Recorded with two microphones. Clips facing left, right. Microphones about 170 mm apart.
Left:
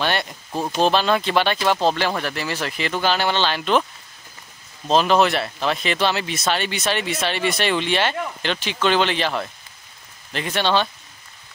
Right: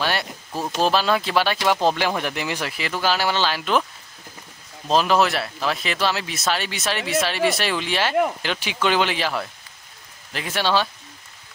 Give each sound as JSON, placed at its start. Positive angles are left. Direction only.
{"t": 0.0, "sound": "speech", "side_deg": -5}
{"t": 0.5, "sound": "speech", "side_deg": 20}
{"t": 0.7, "sound": "speech", "side_deg": -5}
{"t": 4.8, "sound": "speech", "side_deg": -5}